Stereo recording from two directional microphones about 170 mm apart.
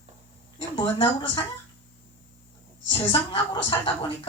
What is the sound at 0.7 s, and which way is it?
Speech, 35° left (ahead or behind).